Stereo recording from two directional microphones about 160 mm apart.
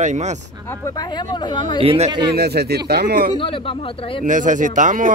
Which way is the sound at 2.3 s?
90° right.